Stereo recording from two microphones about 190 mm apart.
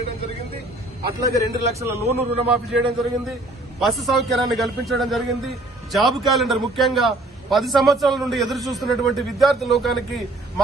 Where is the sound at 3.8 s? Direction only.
Centre (ahead or behind).